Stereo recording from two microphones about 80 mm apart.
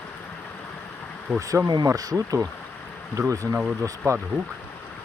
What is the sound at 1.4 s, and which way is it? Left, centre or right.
Speech, right.